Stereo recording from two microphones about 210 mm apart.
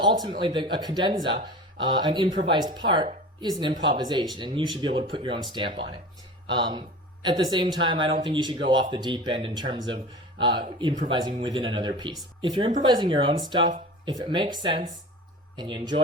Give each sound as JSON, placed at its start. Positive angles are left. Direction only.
{"t": 0.0, "sound": "speech", "side_deg": -20}
{"t": 11.1, "sound": "speech", "side_deg": -20}